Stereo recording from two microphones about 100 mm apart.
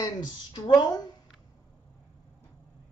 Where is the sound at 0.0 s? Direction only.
45° left (ahead or behind).